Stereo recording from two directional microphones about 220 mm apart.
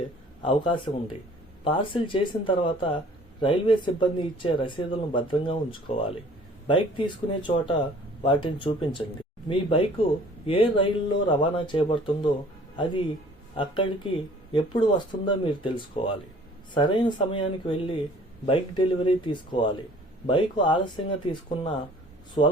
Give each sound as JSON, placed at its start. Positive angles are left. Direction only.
{"t": 0.4, "sound": "speech", "side_deg": 25}
{"t": 22.4, "sound": "speech", "side_deg": 25}